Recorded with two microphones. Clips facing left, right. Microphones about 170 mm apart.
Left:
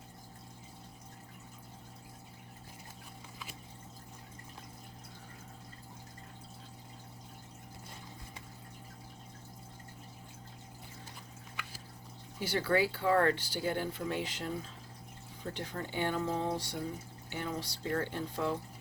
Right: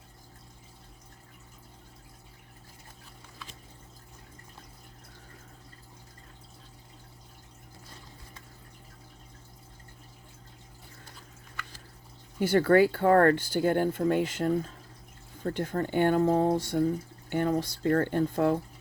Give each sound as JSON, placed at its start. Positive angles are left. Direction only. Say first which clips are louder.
{"t": 12.4, "sound": "speech", "louder": "right 9 dB", "side_deg": -50}